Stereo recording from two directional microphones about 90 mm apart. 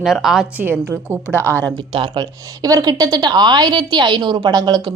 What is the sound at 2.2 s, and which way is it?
A woman's voice, 45° right (ahead or behind).